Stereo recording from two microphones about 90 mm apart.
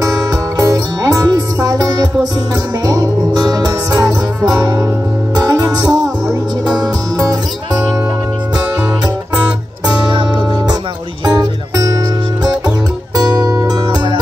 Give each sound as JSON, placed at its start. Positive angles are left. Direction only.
{"t": 0.0, "sound": "music", "side_deg": -40}
{"t": 5.3, "sound": "music", "side_deg": -45}
{"t": 12.6, "sound": "music", "side_deg": -50}